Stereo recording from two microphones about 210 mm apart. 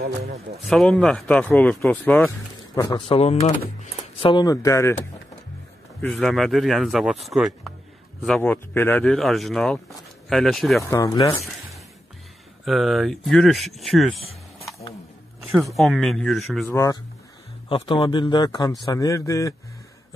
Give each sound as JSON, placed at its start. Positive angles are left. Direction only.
{"t": 0.7, "sound": "speech", "side_deg": 0}
{"t": 2.7, "sound": "speech", "side_deg": 15}
{"t": 3.0, "sound": "speech", "side_deg": 30}
{"t": 5.9, "sound": "speech", "side_deg": 5}
{"t": 10.8, "sound": "speech", "side_deg": 15}
{"t": 12.6, "sound": "speech", "side_deg": 0}
{"t": 15.4, "sound": "speech", "side_deg": 0}
{"t": 16.6, "sound": "speech", "side_deg": 15}
{"t": 17.6, "sound": "speech", "side_deg": 25}